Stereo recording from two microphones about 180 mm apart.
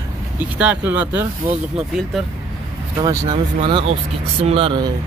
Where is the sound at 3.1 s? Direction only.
20° right (ahead or behind).